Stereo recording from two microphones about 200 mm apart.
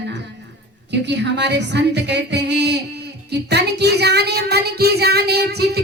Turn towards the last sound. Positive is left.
turn(degrees=-55)  # may be behind; listen again after turning